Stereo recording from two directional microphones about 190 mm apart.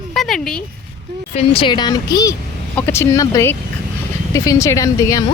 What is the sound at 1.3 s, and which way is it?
Speech, 30° left (ahead or behind).